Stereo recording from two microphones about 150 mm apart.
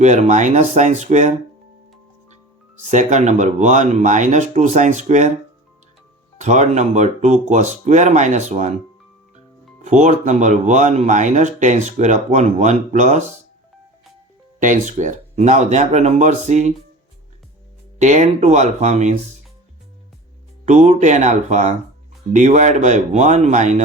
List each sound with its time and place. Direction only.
0.0 s speech: 50° right (ahead or behind)
2.9 s speech: 55° right (ahead or behind)
6.4 s speech: 50° right (ahead or behind)
9.8 s speech: 55° right (ahead or behind)
14.6 s speech: 55° right (ahead or behind)
18.0 s speech: 50° right (ahead or behind)
20.7 s speech: 50° right (ahead or behind)